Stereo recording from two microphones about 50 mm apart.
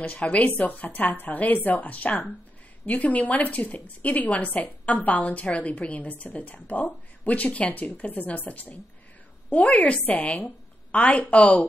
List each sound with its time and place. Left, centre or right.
0.0 s a woman's voice: left